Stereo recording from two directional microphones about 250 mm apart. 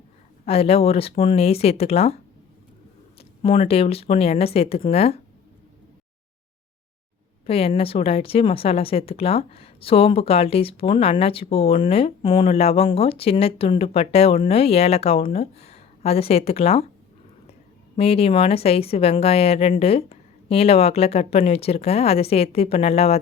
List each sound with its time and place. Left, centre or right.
0.4 s a woman's voice: left
3.2 s a woman's voice: left
7.4 s a woman's voice: left
17.9 s a woman's voice: left